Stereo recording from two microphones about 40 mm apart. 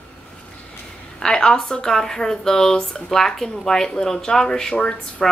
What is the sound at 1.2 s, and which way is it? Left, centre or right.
A woman's voice, centre.